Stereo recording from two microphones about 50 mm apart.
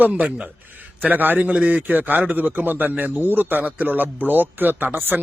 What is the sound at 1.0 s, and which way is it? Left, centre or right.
Speech, right.